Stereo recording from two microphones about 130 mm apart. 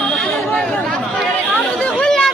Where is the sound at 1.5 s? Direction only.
5° left (ahead or behind).